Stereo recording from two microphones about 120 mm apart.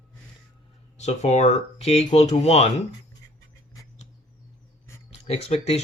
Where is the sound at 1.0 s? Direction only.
70° left (ahead or behind).